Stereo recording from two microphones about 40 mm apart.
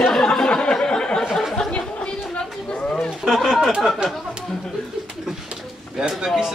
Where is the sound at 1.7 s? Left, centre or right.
Left.